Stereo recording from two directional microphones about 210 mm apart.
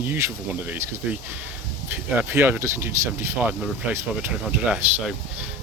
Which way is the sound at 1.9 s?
10° right (ahead or behind).